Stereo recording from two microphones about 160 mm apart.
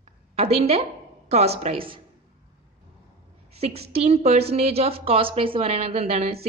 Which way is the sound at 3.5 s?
40° right (ahead or behind).